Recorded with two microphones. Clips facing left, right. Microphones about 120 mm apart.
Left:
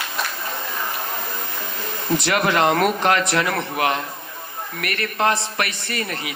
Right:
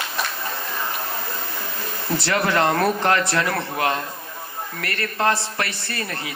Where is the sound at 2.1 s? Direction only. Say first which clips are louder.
Left 1 dB; 20° left (ahead or behind).